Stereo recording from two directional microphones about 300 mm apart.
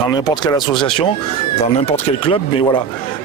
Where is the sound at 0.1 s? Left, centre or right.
Centre.